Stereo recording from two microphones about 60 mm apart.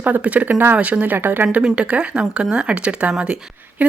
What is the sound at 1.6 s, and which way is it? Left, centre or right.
Speech, centre.